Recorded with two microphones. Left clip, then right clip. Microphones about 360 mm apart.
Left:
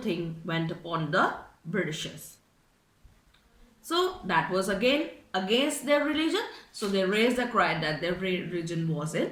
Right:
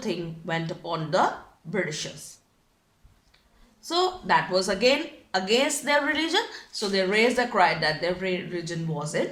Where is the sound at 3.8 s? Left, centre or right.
Centre.